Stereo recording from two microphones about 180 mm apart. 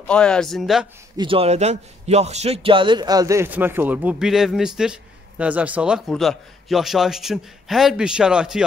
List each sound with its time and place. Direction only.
0.0 s speech: 5° left (ahead or behind)
1.1 s a man's voice: 30° right (ahead or behind); by 8.6 s 5° right (ahead or behind)